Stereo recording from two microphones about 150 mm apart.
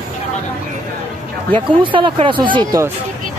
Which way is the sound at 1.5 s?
35° right (ahead or behind).